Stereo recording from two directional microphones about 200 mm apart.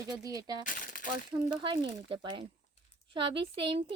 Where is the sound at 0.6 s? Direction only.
40° left (ahead or behind).